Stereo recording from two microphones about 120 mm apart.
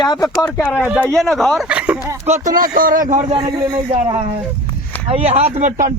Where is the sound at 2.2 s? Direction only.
70° right (ahead or behind).